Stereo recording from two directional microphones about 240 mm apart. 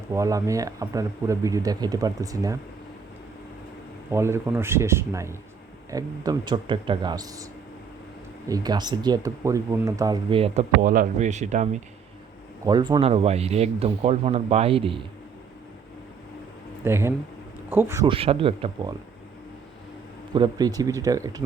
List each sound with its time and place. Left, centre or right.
0.1 s speech: centre
4.1 s speech: centre
8.4 s speech: centre
12.6 s speech: centre
16.8 s speech: centre
20.3 s speech: centre